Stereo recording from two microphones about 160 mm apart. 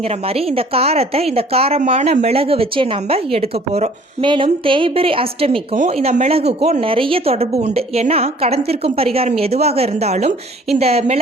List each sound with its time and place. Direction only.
0.1 s speech: 40° right (ahead or behind)